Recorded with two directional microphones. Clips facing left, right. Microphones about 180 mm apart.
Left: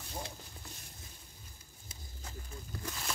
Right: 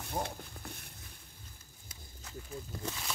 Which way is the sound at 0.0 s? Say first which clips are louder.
Right 7 dB; 60° right (ahead or behind).